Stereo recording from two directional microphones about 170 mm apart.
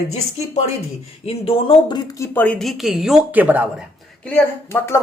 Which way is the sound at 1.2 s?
35° left (ahead or behind).